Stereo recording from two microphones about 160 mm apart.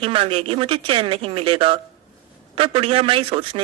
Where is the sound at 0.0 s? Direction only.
35° right (ahead or behind).